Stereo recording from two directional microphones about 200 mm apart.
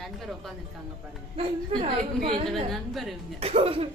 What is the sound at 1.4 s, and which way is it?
A woman's voice, 30° right (ahead or behind).